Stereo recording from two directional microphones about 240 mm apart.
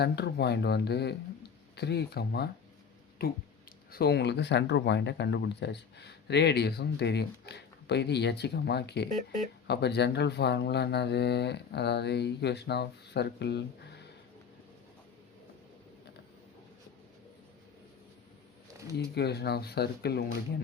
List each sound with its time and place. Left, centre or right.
0.0 s speech: left
18.9 s speech: left